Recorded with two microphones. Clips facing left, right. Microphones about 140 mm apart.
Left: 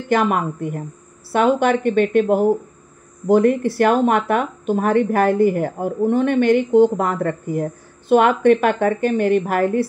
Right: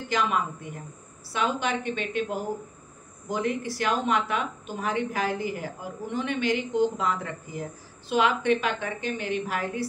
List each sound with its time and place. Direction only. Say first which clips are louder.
0.1 s speech: left 9 dB; 55° left (ahead or behind)